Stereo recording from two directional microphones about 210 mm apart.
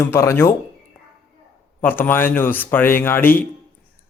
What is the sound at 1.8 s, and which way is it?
Speech, 10° left (ahead or behind).